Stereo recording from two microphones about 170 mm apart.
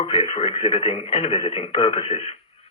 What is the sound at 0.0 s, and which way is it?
Speech, 35° left (ahead or behind).